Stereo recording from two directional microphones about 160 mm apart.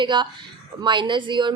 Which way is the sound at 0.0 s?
30° right (ahead or behind).